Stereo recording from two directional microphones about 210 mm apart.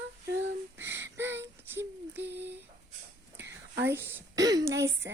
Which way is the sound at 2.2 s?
55° right (ahead or behind).